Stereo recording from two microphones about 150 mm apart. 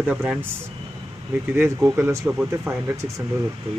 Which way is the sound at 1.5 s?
15° right (ahead or behind).